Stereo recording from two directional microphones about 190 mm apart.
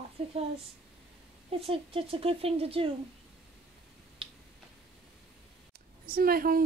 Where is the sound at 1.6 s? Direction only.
30° right (ahead or behind).